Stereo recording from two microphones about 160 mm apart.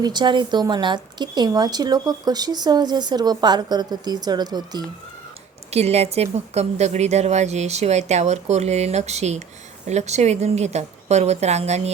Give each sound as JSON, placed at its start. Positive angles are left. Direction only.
{"t": 0.0, "sound": "speech", "side_deg": -25}
{"t": 5.7, "sound": "a woman's voice", "side_deg": -40}